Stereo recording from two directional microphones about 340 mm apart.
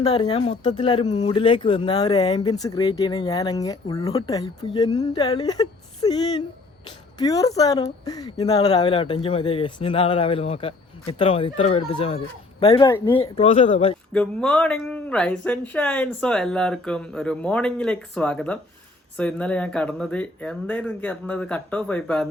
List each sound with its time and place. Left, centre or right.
0.0 s speech: centre
14.1 s speech: centre